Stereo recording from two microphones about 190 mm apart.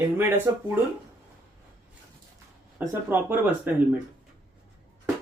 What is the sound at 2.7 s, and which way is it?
Speech, 10° right (ahead or behind).